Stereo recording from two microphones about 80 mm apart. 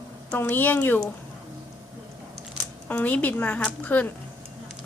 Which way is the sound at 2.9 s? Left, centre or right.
Left.